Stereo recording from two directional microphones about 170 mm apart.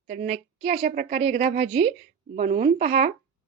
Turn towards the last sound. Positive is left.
turn(degrees=-45)  # may be behind; listen again after turning